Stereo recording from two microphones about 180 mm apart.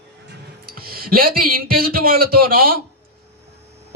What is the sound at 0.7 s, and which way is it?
Speech, 55° right (ahead or behind).